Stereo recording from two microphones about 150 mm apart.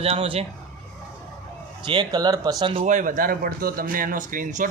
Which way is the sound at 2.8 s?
60° right (ahead or behind).